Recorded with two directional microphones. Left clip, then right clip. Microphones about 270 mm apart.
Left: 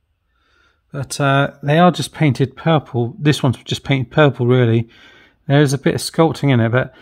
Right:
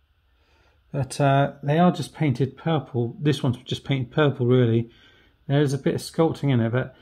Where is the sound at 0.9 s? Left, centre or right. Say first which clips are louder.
Left 5 dB; left.